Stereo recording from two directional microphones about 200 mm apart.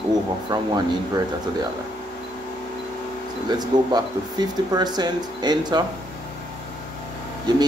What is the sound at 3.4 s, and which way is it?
Speech, 20° right (ahead or behind).